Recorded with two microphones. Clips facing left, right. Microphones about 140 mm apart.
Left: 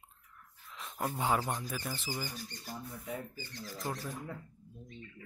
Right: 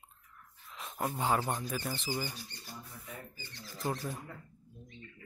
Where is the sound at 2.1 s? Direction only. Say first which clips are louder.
Right 3 dB; 15° right (ahead or behind).